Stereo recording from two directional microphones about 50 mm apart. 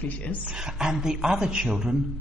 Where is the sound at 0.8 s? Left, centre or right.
Centre.